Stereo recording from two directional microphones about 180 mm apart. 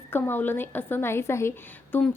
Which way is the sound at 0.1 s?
10° left (ahead or behind).